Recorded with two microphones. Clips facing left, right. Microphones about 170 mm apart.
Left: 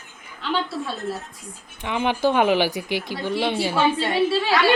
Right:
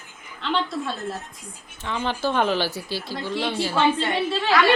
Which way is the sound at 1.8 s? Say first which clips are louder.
Left 4 dB; 15° left (ahead or behind).